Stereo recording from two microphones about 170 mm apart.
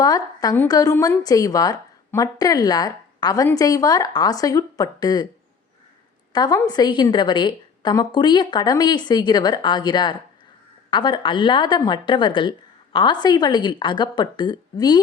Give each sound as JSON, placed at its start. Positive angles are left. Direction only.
{"t": 0.0, "sound": "a woman's voice", "side_deg": 20}
{"t": 6.3, "sound": "a woman's voice", "side_deg": 25}